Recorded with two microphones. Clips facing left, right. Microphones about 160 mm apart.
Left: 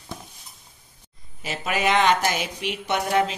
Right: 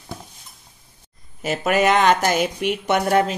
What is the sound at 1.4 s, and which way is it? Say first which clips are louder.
Speech: right 6 dB; 50° right (ahead or behind).